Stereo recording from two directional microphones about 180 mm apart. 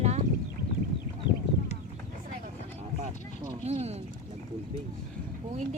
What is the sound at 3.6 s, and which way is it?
Speech, 35° right (ahead or behind).